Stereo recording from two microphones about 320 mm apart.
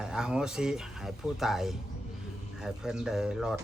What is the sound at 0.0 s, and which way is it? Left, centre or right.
A man's voice, centre.